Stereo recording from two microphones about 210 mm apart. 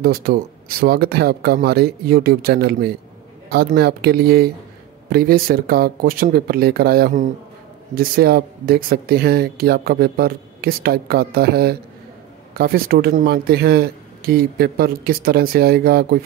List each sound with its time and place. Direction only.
0.0 s speech: 45° right (ahead or behind)